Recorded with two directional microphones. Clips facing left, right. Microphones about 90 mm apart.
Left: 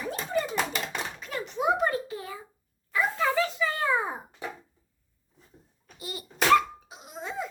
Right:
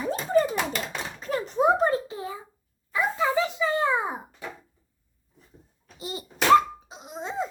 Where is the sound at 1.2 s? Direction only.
40° right (ahead or behind); by 4.2 s 15° right (ahead or behind).